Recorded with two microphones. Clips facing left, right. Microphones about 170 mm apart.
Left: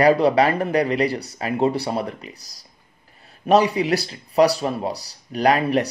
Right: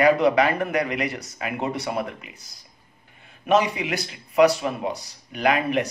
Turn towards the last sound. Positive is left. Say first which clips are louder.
# left 3 dB
turn(degrees=35)  # may be behind; listen again after turning